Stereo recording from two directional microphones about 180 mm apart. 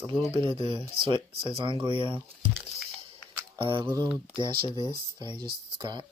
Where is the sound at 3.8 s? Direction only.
20° right (ahead or behind).